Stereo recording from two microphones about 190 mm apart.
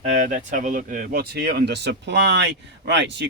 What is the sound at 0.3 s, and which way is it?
Speech, 45° right (ahead or behind).